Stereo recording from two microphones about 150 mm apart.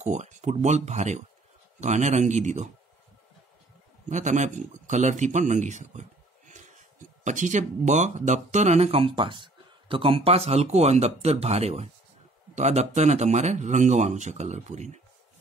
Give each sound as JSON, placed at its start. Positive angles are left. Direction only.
{"t": 0.0, "sound": "speech", "side_deg": -50}
{"t": 4.1, "sound": "a man's voice", "side_deg": -55}